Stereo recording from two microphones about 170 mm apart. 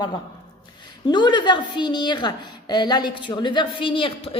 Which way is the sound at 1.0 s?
25° left (ahead or behind).